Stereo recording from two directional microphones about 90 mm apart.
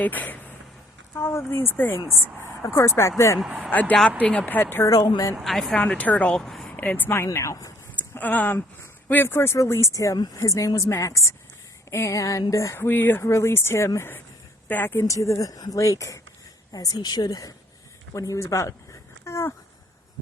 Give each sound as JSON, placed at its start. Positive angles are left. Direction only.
{"t": 0.0, "sound": "speech", "side_deg": 20}
{"t": 1.1, "sound": "speech", "side_deg": 30}
{"t": 2.6, "sound": "speech", "side_deg": 35}
{"t": 3.4, "sound": "speech", "side_deg": -5}
{"t": 3.7, "sound": "speech", "side_deg": 20}
{"t": 4.9, "sound": "speech", "side_deg": 40}
{"t": 5.3, "sound": "speech", "side_deg": 0}
{"t": 5.8, "sound": "speech", "side_deg": 15}
{"t": 6.3, "sound": "speech", "side_deg": 5}
{"t": 6.7, "sound": "speech", "side_deg": 20}
{"t": 7.3, "sound": "speech", "side_deg": 35}
{"t": 7.9, "sound": "a sound", "side_deg": 20}
{"t": 9.0, "sound": "speech", "side_deg": 25}
{"t": 15.0, "sound": "a woman's voice", "side_deg": 35}